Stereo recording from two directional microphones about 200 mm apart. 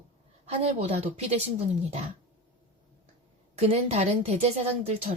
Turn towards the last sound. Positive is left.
turn(degrees=-30)  # may be behind; listen again after turning